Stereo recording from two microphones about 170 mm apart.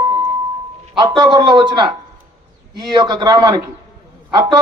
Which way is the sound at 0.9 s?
25° right (ahead or behind).